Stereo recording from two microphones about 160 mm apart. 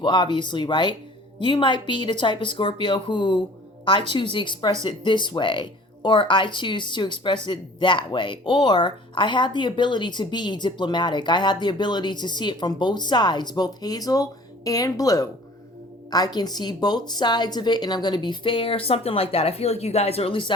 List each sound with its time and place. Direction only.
0.0 s speech: 30° left (ahead or behind)